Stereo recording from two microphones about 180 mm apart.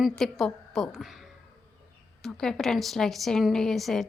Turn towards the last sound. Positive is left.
turn(degrees=0)  # may be behind; listen again after turning